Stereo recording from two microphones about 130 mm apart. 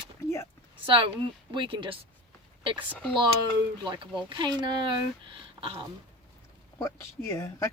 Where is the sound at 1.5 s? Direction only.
40° right (ahead or behind).